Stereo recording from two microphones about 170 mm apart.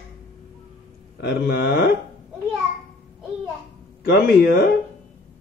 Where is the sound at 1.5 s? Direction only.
70° left (ahead or behind).